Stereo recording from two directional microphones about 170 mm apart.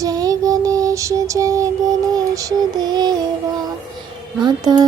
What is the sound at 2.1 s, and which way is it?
Music, 20° right (ahead or behind).